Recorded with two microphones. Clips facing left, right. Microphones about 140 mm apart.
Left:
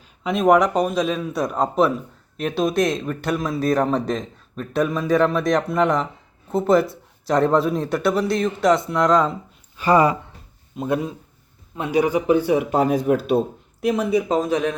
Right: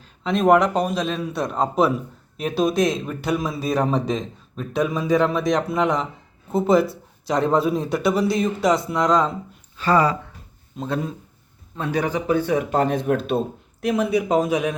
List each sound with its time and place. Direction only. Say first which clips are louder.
0.0 s speech: even; 5° left (ahead or behind)
9.7 s speech: left 2 dB; 15° left (ahead or behind); by 14.8 s 10° right (ahead or behind)